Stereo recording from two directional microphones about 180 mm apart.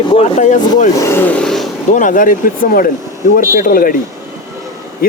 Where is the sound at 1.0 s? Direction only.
10° left (ahead or behind).